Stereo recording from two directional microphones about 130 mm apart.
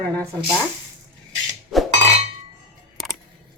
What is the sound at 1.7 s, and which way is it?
Chink, centre (ahead or behind).